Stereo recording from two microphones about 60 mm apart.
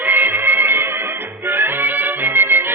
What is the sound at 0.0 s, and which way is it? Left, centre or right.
Music, right.